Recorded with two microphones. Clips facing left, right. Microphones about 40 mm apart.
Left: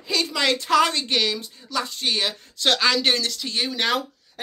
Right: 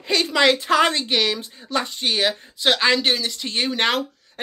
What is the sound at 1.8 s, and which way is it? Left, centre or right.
Speech, centre.